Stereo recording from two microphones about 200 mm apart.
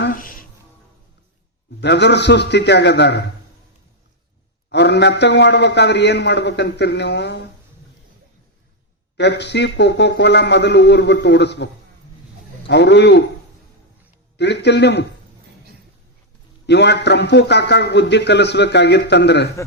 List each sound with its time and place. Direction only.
0.0 s music: 45° left (ahead or behind)
1.8 s a man's voice: 60° left (ahead or behind)
4.7 s a man's voice: 60° left (ahead or behind)
9.1 s a man's voice: 60° left (ahead or behind)
14.3 s a man's voice: 60° left (ahead or behind)
16.6 s a man's voice: 60° left (ahead or behind)